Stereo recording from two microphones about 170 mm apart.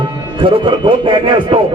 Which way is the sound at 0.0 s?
30° right (ahead or behind).